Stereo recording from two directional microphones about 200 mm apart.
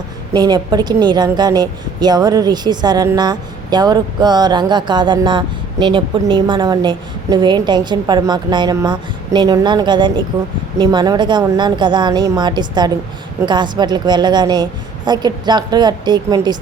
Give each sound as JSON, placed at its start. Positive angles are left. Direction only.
{"t": 0.3, "sound": "a woman's voice", "side_deg": -20}